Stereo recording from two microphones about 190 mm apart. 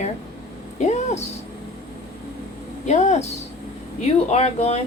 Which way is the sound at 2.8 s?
40° left (ahead or behind).